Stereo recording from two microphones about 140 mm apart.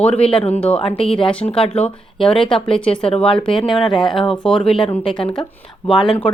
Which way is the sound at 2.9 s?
40° left (ahead or behind).